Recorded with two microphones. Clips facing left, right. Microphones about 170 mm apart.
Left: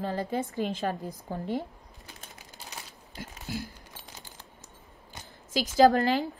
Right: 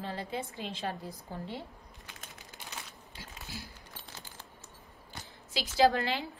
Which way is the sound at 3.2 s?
50° left (ahead or behind).